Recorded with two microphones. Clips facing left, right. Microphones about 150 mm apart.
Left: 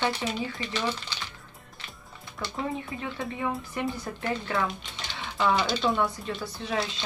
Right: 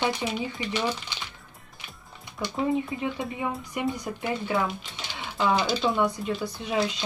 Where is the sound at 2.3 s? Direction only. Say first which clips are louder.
Right 6 dB; 15° right (ahead or behind).